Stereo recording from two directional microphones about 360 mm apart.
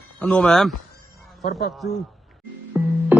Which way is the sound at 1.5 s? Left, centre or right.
Left.